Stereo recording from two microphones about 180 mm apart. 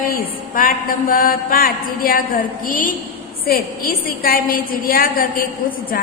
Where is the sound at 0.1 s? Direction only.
50° left (ahead or behind).